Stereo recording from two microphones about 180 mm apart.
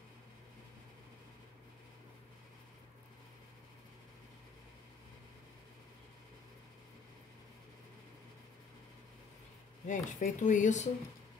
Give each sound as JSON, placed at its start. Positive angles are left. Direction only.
{"t": 9.8, "sound": "speech", "side_deg": 45}